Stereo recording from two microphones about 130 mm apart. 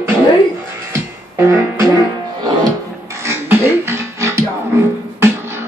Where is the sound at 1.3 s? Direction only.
20° right (ahead or behind).